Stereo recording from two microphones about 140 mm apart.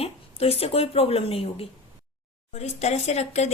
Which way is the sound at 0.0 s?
45° left (ahead or behind).